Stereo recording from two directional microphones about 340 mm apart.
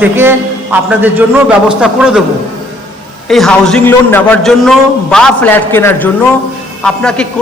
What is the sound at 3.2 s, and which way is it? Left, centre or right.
A man's voice, centre.